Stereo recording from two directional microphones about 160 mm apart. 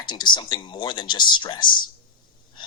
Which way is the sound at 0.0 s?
30° left (ahead or behind).